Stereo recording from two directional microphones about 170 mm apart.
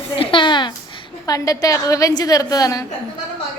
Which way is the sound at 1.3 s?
20° left (ahead or behind).